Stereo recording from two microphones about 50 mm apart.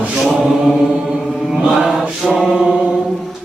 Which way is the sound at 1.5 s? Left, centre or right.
Centre.